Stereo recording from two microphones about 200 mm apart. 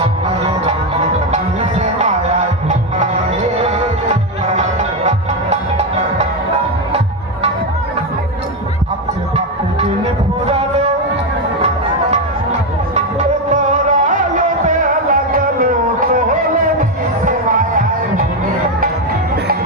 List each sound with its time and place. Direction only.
1.3 s music: 35° right (ahead or behind)
10.4 s a sound: 30° right (ahead or behind)
13.5 s music: 40° right (ahead or behind)